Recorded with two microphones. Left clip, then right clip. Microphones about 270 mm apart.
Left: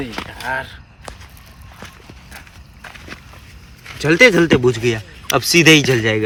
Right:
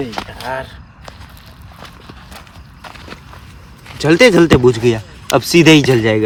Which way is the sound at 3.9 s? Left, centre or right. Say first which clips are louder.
Right 2 dB; right.